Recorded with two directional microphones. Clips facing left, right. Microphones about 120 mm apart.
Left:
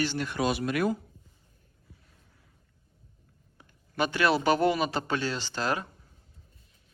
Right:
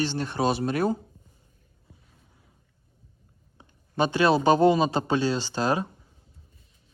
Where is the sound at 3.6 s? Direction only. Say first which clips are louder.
Right 4 dB; 20° right (ahead or behind).